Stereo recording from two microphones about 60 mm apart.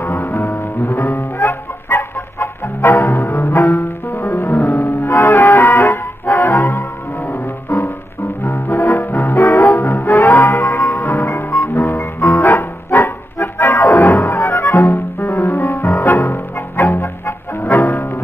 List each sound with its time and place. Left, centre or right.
0.0 s music: left
0.8 s chicken: left
4.6 s music: left
17.7 s bowed string instrument: left